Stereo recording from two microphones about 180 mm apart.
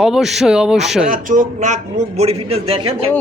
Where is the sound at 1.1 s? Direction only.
45° right (ahead or behind).